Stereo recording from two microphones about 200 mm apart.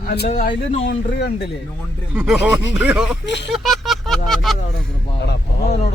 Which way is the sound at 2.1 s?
5° right (ahead or behind).